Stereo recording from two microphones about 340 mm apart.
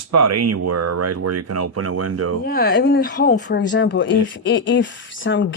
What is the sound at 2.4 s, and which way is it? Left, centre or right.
Speech, left.